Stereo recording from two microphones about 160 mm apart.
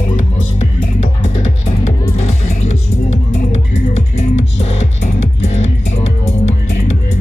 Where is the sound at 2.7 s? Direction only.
40° left (ahead or behind).